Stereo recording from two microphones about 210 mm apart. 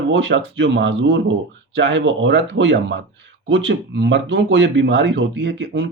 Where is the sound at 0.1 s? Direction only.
60° right (ahead or behind).